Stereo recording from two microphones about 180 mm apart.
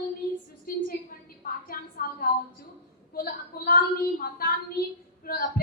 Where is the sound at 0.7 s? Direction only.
55° left (ahead or behind).